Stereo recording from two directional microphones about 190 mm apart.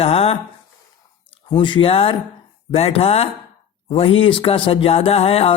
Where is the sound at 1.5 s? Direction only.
25° left (ahead or behind).